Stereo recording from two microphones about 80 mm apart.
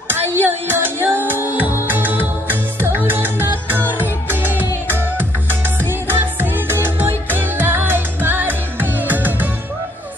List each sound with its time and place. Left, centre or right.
0.1 s music: right